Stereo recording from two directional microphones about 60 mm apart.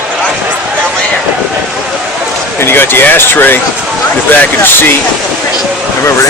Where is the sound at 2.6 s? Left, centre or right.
Left.